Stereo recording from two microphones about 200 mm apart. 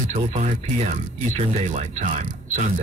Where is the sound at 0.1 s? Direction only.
35° right (ahead or behind).